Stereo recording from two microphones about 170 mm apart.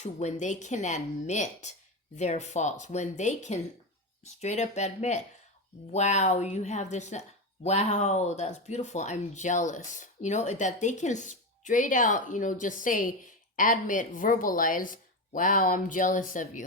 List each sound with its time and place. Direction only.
0.0 s speech: 45° left (ahead or behind)